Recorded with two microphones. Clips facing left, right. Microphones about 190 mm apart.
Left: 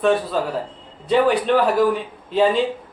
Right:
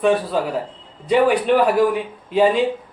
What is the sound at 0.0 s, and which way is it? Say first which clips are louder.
A man's voice: right 1 dB; 10° right (ahead or behind).